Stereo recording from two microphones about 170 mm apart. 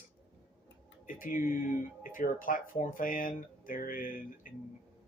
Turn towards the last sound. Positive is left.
turn(degrees=55)  # may be behind; listen again after turning